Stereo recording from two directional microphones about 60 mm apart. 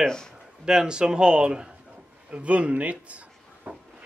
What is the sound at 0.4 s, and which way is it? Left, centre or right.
Speech, centre.